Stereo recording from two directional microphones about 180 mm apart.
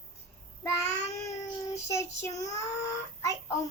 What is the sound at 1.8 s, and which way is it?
Speech, 15° left (ahead or behind).